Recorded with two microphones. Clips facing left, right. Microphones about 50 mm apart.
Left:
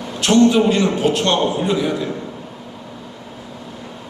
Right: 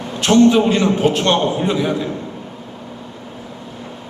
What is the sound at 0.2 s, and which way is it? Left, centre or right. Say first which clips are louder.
A man's voice: right 1 dB; right.